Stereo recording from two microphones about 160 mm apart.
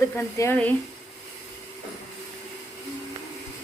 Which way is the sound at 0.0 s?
15° left (ahead or behind).